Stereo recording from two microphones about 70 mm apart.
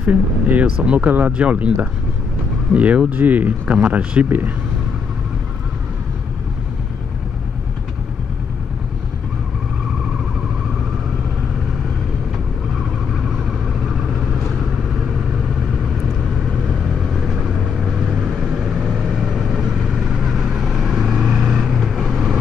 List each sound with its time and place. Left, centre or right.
0.1 s speech: right
4.3 s speech: right
13.4 s vehicle: centre
16.9 s vehicle: centre